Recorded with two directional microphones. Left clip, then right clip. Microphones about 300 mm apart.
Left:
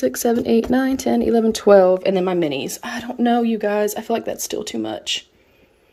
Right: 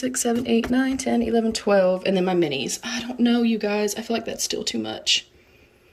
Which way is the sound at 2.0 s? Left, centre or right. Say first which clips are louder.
Left 3 dB; centre.